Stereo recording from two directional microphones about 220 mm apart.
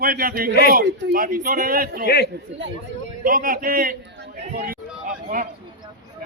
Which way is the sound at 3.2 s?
40° right (ahead or behind).